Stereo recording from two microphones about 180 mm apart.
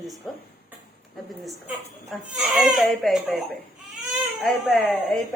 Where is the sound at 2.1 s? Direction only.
Centre (ahead or behind).